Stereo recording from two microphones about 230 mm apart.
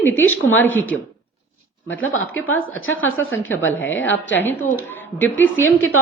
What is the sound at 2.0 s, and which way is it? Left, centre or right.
Speech, left.